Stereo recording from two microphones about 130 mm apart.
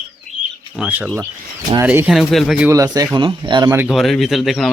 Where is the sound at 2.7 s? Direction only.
25° right (ahead or behind).